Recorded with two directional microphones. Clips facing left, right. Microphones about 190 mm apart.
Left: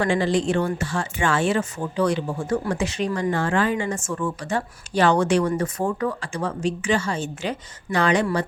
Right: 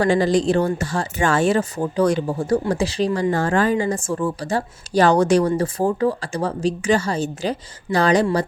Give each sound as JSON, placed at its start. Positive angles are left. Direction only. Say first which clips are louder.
{"t": 0.0, "sound": "speech", "louder": "right 4 dB", "side_deg": -40}
{"t": 3.3, "sound": "speech", "louder": "right 3 dB", "side_deg": -40}